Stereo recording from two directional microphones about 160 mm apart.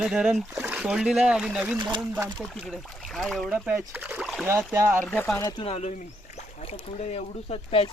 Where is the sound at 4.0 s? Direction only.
10° right (ahead or behind).